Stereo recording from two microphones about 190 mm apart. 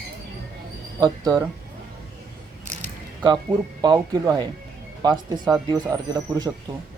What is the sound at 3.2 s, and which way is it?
Speech, 20° right (ahead or behind).